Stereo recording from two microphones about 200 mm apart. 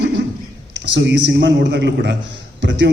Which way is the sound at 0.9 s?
60° right (ahead or behind).